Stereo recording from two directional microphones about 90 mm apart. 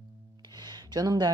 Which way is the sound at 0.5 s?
50° right (ahead or behind).